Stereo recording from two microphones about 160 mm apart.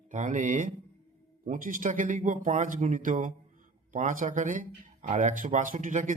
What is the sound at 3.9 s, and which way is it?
Mantra, 55° right (ahead or behind).